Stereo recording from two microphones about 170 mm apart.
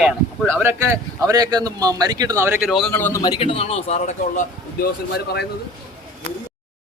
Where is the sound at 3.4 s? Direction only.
35° left (ahead or behind).